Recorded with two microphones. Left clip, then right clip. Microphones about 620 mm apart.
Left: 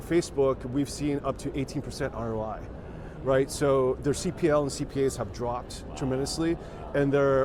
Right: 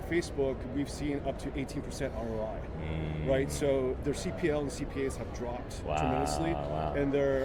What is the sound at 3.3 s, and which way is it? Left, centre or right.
Speech, left.